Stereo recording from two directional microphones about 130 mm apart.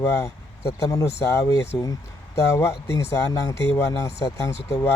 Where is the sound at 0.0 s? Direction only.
25° left (ahead or behind).